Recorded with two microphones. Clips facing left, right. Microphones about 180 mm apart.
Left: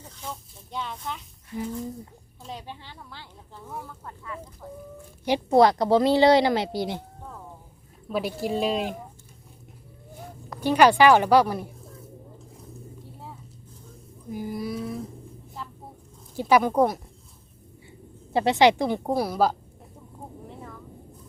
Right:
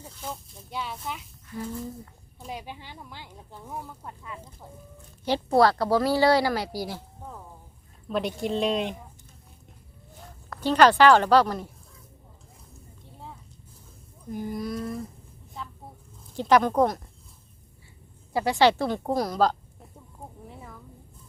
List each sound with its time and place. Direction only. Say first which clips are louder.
0.0 s speech: right 1 dB; 5° right (ahead or behind)
1.5 s speech: left 3 dB; 25° left (ahead or behind)
2.4 s speech: right 1 dB; 10° right (ahead or behind)
5.2 s speech: left 2 dB; 15° left (ahead or behind)
8.1 s speech: even; 5° left (ahead or behind)
10.5 s a woman's voice: left 1 dB; 10° left (ahead or behind)
14.3 s speech: even; 5° left (ahead or behind)
15.6 s a sound: even; centre (ahead or behind)
16.3 s a woman's voice: even; 10° left (ahead or behind)
18.3 s a woman's voice: left 2 dB; 25° left (ahead or behind)